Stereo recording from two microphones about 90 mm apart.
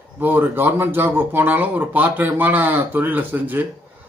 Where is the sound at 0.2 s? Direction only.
20° right (ahead or behind).